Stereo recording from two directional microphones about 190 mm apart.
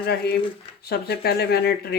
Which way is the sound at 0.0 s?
55° left (ahead or behind).